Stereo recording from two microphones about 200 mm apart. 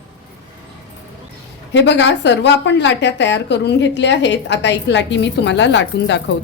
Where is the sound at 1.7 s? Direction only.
60° left (ahead or behind).